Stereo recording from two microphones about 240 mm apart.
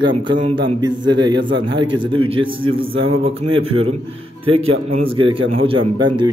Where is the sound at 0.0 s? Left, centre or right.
Right.